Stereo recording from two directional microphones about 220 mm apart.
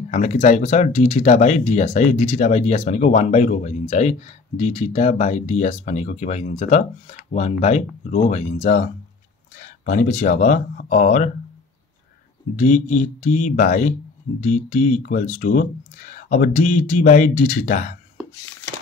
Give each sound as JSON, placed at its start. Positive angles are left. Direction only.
{"t": 0.1, "sound": "speech", "side_deg": 30}
{"t": 12.5, "sound": "speech", "side_deg": 35}